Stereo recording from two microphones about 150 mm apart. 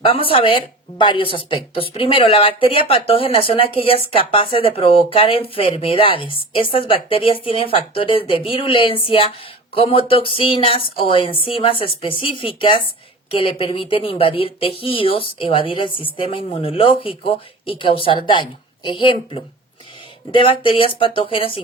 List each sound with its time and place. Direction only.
0.0 s speech: 35° left (ahead or behind)